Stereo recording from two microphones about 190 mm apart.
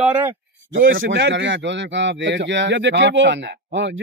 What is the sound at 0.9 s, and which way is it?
Speech, 60° right (ahead or behind).